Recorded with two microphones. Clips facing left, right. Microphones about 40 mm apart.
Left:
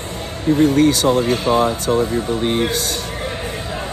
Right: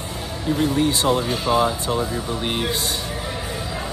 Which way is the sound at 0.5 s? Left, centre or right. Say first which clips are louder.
Left 7 dB; left.